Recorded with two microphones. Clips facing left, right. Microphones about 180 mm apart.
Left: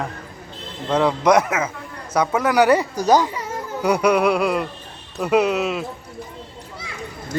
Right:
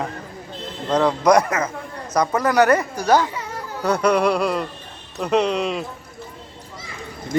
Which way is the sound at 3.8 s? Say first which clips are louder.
Left 1 dB; 10° left (ahead or behind).